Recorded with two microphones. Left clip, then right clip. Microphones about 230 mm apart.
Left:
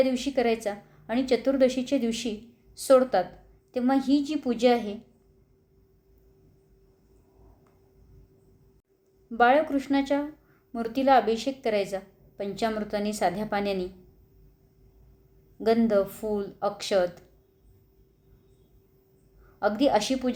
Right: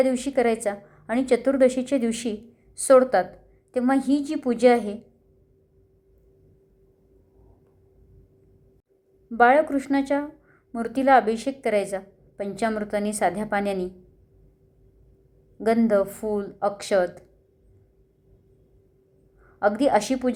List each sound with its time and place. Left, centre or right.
0.0 s a woman's voice: centre
9.3 s a woman's voice: centre
15.5 s a woman's voice: centre
19.5 s a woman's voice: centre